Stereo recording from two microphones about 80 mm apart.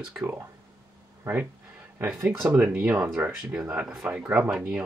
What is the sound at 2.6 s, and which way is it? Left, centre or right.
Speech, centre.